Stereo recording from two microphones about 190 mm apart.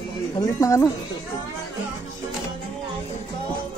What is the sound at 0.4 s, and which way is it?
Speech, 15° left (ahead or behind).